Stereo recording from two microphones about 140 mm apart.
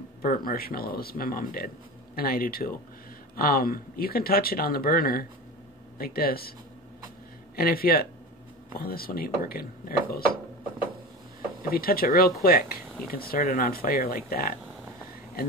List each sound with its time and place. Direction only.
0.2 s speech: 90° left
7.5 s speech: 90° left
11.7 s speech: 90° left